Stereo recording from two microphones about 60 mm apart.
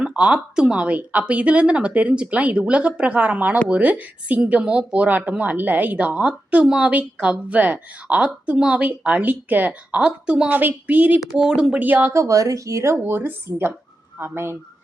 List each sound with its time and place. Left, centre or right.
0.0 s a sound: centre
0.3 s a woman's voice: centre
10.5 s a woman's voice: right
11.3 s speech: centre
11.7 s a woman's voice: right
12.1 s speech: right
13.0 s speech: right